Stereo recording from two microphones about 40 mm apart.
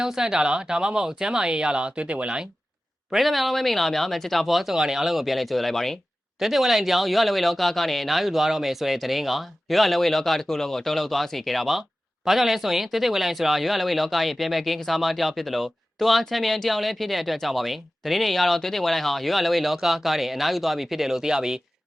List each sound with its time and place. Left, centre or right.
0.0 s speech: centre; by 2.3 s right
3.1 s speech: centre
6.4 s speech: centre